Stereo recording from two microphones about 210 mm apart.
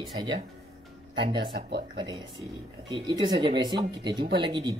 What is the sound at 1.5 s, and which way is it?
Speech, 50° right (ahead or behind).